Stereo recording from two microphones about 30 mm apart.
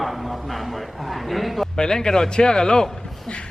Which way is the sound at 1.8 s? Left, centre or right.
Left.